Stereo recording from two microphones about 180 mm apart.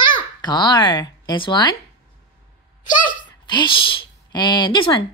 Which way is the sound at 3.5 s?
25° left (ahead or behind).